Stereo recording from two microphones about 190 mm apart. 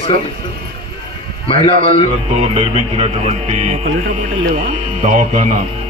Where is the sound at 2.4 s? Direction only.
30° right (ahead or behind).